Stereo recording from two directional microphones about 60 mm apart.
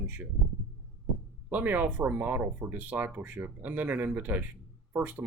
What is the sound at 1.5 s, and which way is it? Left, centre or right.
Speech, right.